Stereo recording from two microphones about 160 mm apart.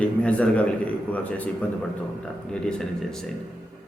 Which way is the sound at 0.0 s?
10° left (ahead or behind).